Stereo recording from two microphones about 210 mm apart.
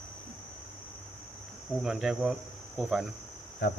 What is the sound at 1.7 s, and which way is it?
Speech, centre (ahead or behind).